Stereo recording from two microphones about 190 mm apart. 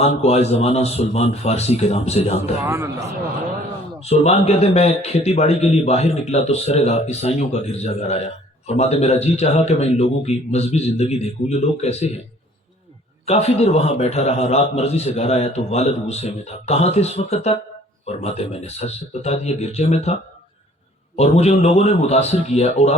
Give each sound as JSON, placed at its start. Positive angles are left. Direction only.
{"t": 0.0, "sound": "a man's voice", "side_deg": 35}
{"t": 2.4, "sound": "a man's voice", "side_deg": -15}
{"t": 4.0, "sound": "a man's voice", "side_deg": 35}
{"t": 13.2, "sound": "a man's voice", "side_deg": 35}
{"t": 21.2, "sound": "a man's voice", "side_deg": 35}